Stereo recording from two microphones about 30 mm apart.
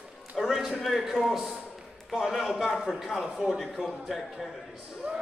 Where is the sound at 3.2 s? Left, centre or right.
Centre.